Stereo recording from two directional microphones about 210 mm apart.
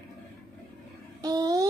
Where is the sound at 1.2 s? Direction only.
15° right (ahead or behind).